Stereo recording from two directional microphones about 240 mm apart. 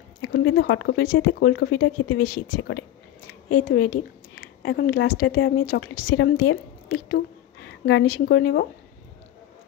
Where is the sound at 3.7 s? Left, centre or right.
Left.